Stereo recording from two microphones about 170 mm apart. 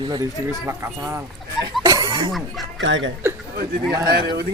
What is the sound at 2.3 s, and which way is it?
Speech, centre (ahead or behind).